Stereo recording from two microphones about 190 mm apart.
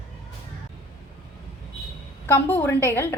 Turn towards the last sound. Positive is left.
turn(degrees=10)  # may be behind; listen again after turning